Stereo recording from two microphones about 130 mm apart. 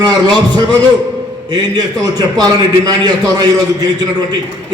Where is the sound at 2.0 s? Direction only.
30° right (ahead or behind).